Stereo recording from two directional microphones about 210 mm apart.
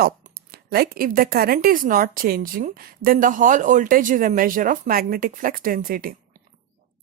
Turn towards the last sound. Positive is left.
turn(degrees=-45)  # may be behind; listen again after turning